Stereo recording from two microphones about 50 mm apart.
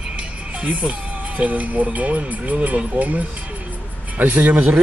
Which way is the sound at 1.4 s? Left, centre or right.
Right.